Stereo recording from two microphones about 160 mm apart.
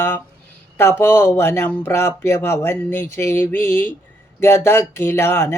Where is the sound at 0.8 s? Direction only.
15° left (ahead or behind).